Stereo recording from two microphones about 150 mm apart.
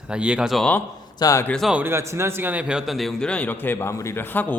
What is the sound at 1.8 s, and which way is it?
A man's voice, 15° right (ahead or behind).